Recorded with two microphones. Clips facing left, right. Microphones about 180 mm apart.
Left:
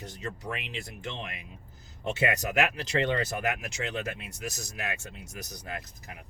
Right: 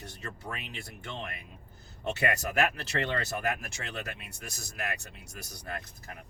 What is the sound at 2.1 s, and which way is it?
Speech, 20° left (ahead or behind).